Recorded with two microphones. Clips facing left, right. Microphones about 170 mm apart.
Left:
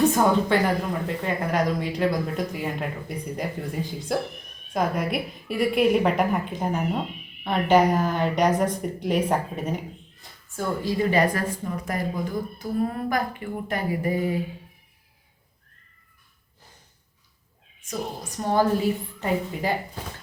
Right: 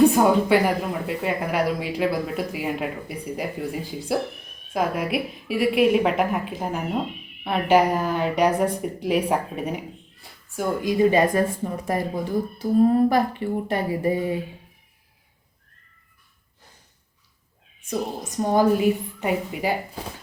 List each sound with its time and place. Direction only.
0.0 s a woman's voice: 10° right (ahead or behind)
12.5 s speech: 30° right (ahead or behind)
18.5 s speech: 10° right (ahead or behind)